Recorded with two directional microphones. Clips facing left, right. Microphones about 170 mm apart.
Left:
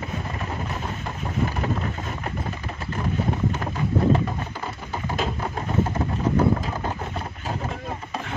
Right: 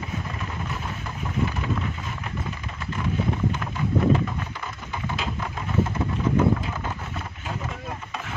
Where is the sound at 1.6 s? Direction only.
40° left (ahead or behind).